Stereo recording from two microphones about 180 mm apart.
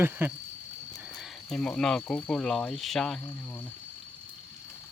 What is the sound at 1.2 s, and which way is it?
Speech, centre (ahead or behind).